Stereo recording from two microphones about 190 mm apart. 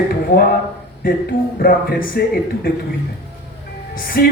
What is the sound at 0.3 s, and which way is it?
A man's voice, 55° left (ahead or behind).